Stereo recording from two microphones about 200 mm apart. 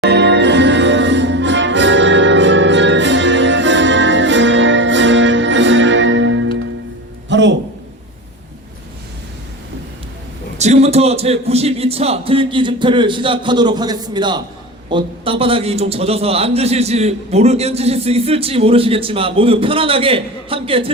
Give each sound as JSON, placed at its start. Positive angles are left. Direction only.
{"t": 0.0, "sound": "music", "side_deg": -60}
{"t": 10.6, "sound": "a man's voice", "side_deg": -35}